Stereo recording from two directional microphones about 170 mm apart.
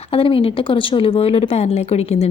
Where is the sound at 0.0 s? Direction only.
35° left (ahead or behind).